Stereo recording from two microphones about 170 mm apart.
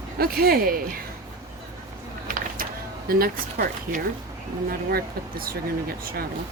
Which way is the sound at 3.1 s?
60° right (ahead or behind).